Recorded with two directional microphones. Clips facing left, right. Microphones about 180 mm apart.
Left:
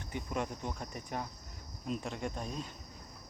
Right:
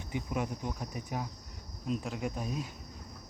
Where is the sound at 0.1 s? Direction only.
5° right (ahead or behind).